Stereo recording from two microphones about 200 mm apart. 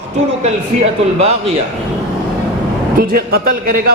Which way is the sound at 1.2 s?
30° right (ahead or behind).